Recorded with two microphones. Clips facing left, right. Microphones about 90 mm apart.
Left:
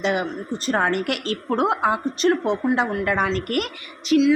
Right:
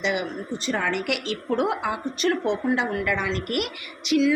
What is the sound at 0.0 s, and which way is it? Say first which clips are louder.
A woman's voice: left 3 dB; 40° left (ahead or behind).